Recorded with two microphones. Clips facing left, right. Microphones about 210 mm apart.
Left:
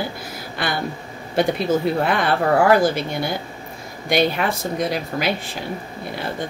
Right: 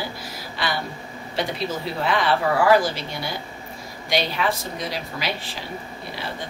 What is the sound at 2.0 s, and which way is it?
Speech, 50° left (ahead or behind).